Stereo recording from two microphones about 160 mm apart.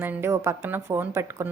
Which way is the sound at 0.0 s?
15° right (ahead or behind).